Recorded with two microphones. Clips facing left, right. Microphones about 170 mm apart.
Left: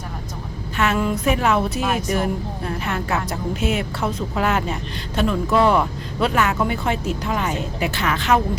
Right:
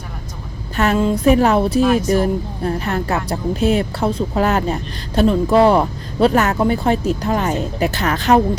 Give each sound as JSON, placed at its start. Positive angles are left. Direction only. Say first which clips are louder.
{"t": 0.9, "sound": "a woman's voice", "louder": "right 7 dB", "side_deg": -30}